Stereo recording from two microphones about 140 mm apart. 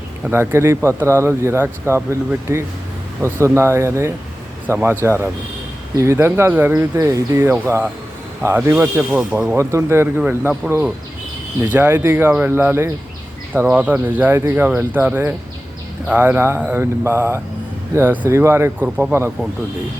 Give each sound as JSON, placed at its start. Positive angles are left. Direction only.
{"t": 0.3, "sound": "speech", "side_deg": -15}